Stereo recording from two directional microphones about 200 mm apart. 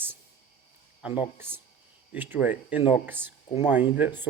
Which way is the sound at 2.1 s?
10° right (ahead or behind).